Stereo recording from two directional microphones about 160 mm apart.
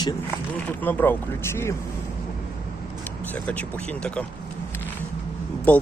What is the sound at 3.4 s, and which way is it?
Speech, 10° left (ahead or behind).